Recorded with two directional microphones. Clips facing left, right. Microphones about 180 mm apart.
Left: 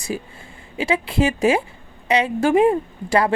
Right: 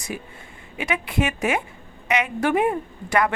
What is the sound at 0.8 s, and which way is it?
Speech, 30° left (ahead or behind).